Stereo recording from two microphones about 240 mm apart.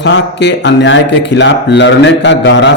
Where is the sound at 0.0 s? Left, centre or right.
Left.